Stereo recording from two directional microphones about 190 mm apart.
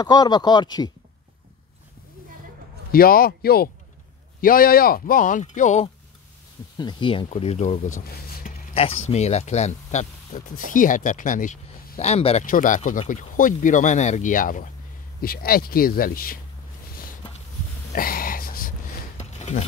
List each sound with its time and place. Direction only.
0.0 s speech: 20° left (ahead or behind)
2.9 s speech: 50° left (ahead or behind)
6.8 s speech: 25° left (ahead or behind)
8.1 s a sound: 50° left (ahead or behind)
8.7 s speech: 35° left (ahead or behind)
12.4 s speech: 45° left (ahead or behind)
17.9 s a sound: 50° left (ahead or behind)